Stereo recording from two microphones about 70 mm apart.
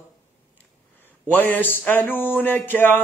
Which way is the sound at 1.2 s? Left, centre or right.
Left.